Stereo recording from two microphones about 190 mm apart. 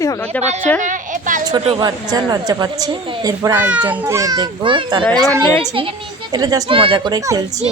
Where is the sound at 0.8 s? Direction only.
40° right (ahead or behind).